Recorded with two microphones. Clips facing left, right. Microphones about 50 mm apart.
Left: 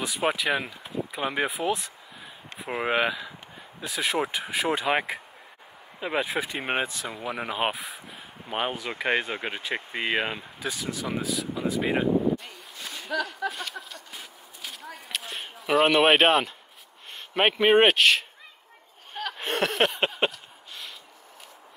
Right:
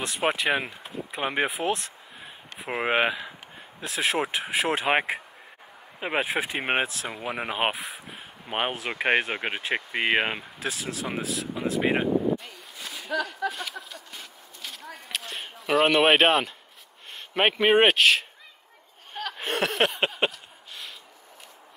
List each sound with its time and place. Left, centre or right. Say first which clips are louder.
0.0 s speech: right 1 dB; centre
2.6 s speech: right 1 dB; centre
3.8 s speech: right 1 dB; centre
5.9 s speech: right 1 dB; right
7.7 s speech: right 1 dB; centre
8.5 s speech: right 1 dB; right
10.6 s speech: left 1 dB; centre
11.5 s speech: right 2 dB; centre
12.4 s a sound: even; centre
17.3 s speech: left 1 dB; centre
19.1 s a sound: even; centre